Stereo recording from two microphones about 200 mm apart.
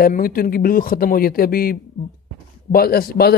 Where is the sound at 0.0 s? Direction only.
45° left (ahead or behind).